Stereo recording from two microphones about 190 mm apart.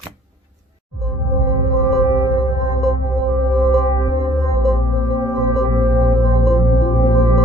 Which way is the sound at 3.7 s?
20° left (ahead or behind).